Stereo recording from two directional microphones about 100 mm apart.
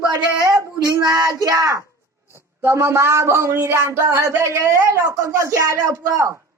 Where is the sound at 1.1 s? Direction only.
35° right (ahead or behind).